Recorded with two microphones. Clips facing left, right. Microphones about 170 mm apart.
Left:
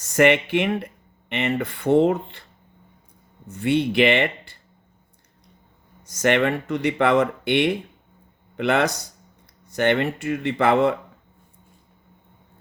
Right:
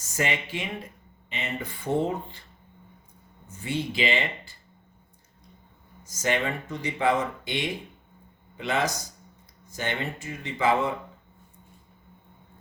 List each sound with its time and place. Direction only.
0.0 s speech: 70° left (ahead or behind)
3.5 s speech: 70° left (ahead or behind)
6.1 s speech: 65° left (ahead or behind)